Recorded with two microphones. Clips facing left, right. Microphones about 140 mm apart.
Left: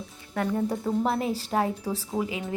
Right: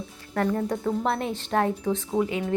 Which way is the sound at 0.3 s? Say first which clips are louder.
Right 2 dB; 5° left (ahead or behind).